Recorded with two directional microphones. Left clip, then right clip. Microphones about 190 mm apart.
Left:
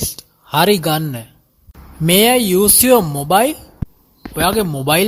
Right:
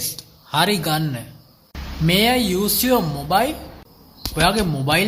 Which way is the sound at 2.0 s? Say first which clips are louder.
Left 5 dB; 50° left (ahead or behind).